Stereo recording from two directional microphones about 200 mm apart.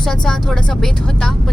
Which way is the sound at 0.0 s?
5° left (ahead or behind).